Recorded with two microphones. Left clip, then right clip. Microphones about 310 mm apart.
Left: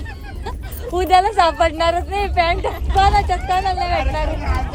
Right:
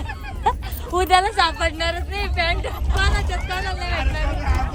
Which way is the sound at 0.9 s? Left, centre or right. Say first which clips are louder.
Left 3 dB; centre.